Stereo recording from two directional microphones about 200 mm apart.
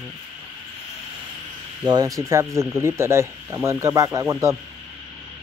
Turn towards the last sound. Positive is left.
turn(degrees=-15)  # may be behind; listen again after turning